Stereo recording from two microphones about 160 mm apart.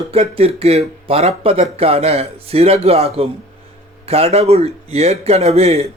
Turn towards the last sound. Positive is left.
turn(degrees=-40)  # may be behind; listen again after turning